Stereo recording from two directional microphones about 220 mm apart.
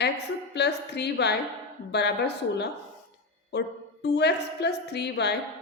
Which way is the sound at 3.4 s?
50° left (ahead or behind).